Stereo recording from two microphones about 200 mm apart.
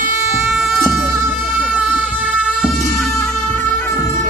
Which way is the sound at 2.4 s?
Centre (ahead or behind).